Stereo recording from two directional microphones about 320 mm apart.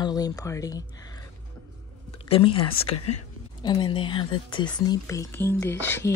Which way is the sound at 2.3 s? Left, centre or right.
Centre.